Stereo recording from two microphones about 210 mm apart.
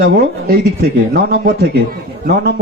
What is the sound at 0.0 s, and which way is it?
A man's voice, 45° right (ahead or behind).